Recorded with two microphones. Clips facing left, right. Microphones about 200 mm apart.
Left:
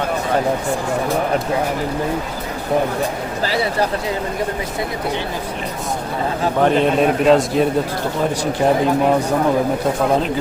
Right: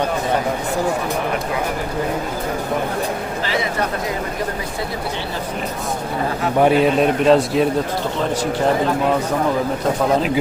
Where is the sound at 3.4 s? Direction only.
35° left (ahead or behind).